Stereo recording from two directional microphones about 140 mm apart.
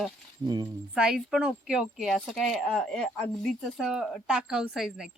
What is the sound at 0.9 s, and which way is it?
Speech, 5° right (ahead or behind).